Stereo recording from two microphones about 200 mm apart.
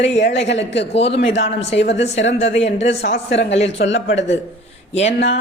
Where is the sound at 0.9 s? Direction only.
30° left (ahead or behind).